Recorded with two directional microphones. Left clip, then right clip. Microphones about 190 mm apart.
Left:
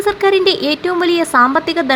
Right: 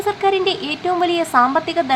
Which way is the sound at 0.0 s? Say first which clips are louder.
Left 5 dB; 15° left (ahead or behind).